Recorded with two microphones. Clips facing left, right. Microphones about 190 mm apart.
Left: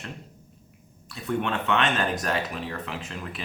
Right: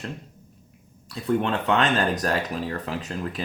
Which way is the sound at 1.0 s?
35° right (ahead or behind).